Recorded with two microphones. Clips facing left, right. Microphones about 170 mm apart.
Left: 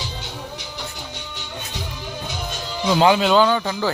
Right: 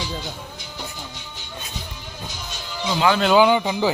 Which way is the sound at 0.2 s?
75° left (ahead or behind).